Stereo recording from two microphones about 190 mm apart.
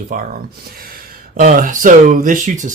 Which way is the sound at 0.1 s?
45° right (ahead or behind).